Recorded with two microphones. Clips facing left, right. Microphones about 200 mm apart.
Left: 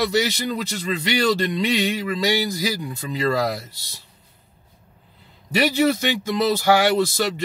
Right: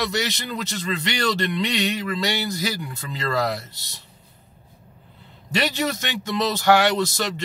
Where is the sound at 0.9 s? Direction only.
15° left (ahead or behind).